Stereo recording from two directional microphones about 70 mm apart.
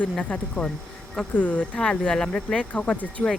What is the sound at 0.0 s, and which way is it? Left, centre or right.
Speech, centre.